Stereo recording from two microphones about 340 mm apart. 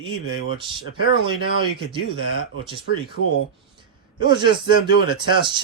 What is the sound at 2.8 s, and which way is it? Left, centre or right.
Speech, left.